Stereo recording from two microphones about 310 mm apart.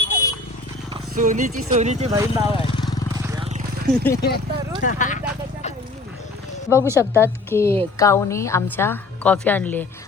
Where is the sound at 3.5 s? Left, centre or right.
Right.